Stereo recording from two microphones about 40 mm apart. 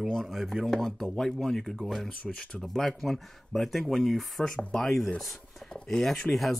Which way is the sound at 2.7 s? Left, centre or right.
Centre.